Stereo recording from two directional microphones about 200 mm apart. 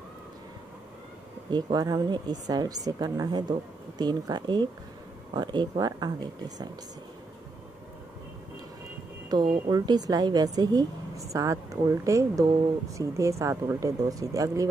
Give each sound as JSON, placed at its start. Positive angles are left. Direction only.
{"t": 1.5, "sound": "speech", "side_deg": -20}
{"t": 9.3, "sound": "a woman's voice", "side_deg": -20}